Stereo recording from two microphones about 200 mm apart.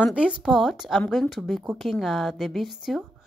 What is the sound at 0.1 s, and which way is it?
Speech, 5° right (ahead or behind).